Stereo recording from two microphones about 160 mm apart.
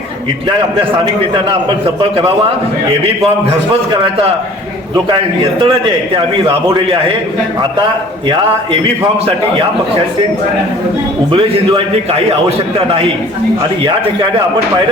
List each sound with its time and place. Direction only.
2.0 s a man's voice: 35° right (ahead or behind)
5.0 s a man's voice: 30° right (ahead or behind)
11.3 s a man's voice: 30° right (ahead or behind)
13.8 s a man's voice: 30° right (ahead or behind)